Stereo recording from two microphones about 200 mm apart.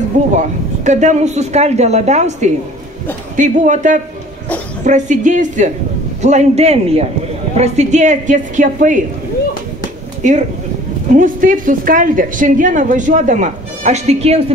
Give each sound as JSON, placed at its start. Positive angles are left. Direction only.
{"t": 0.4, "sound": "a woman's voice", "side_deg": -35}
{"t": 10.2, "sound": "a woman's voice", "side_deg": -40}